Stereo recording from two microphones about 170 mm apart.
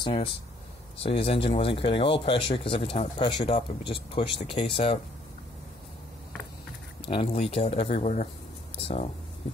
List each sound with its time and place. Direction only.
0.0 s speech: 30° left (ahead or behind)
7.1 s speech: 35° left (ahead or behind)